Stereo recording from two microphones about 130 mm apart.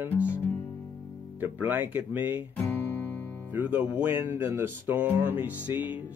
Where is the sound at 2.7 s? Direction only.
15° left (ahead or behind).